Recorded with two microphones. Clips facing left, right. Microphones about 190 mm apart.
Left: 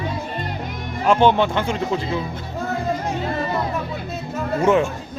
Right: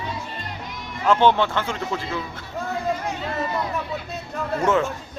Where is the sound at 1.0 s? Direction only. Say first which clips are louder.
Left 2 dB; 15° left (ahead or behind).